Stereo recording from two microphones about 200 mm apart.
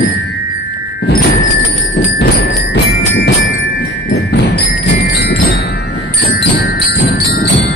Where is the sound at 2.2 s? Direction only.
45° left (ahead or behind).